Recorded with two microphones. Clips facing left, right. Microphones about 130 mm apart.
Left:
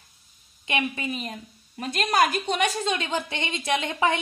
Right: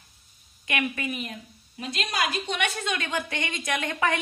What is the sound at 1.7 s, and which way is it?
A woman's voice, 50° left (ahead or behind).